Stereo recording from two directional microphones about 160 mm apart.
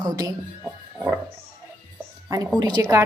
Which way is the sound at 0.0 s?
20° right (ahead or behind).